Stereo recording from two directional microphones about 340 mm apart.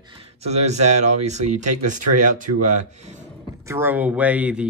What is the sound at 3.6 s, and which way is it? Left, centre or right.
Speech, centre.